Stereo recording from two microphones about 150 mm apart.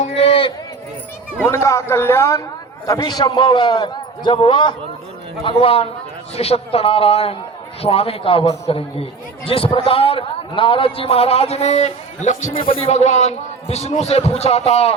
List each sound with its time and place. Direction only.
0.0 s run: 45° left (ahead or behind)
1.5 s a man's voice: 20° left (ahead or behind); by 12.5 s 50° left (ahead or behind)
12.5 s speech: 40° left (ahead or behind)